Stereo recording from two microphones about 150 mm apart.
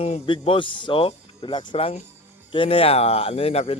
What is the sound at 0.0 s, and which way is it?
Speech, 40° left (ahead or behind).